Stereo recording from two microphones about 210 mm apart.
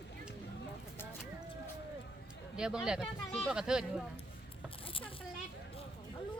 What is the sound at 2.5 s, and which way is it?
Speech, 5° right (ahead or behind).